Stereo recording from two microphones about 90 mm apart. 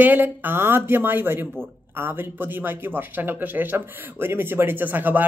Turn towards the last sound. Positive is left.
turn(degrees=-20)  # may be behind; listen again after turning